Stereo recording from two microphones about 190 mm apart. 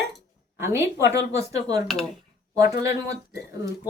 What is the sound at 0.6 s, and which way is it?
Speech, 15° right (ahead or behind).